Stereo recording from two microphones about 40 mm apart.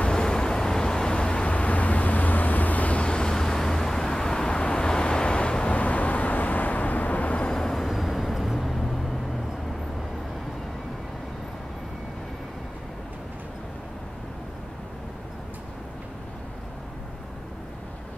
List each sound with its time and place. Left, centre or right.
0.0 s vehicle: centre
5.8 s vehicle: left
7.4 s music: centre
8.6 s vehicle: centre